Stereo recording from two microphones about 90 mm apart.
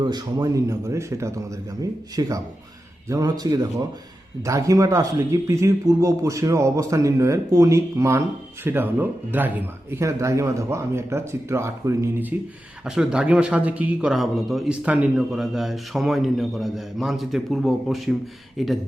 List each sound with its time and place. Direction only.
0.0 s speech: 50° right (ahead or behind)
2.2 s speech: 45° right (ahead or behind)
8.6 s speech: 20° right (ahead or behind)
10.0 s speech: 35° right (ahead or behind)
12.3 s speech: 20° right (ahead or behind)
12.8 s speech: 5° right (ahead or behind)
14.1 s speech: centre (ahead or behind)
14.7 s speech: 10° right (ahead or behind)